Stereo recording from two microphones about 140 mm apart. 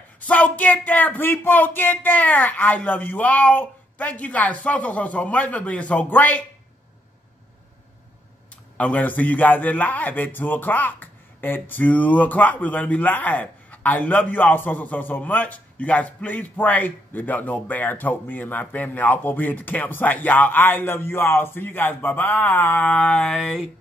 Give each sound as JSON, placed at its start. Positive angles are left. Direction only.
{"t": 0.2, "sound": "a man's voice", "side_deg": 10}
{"t": 8.7, "sound": "a man's voice", "side_deg": 10}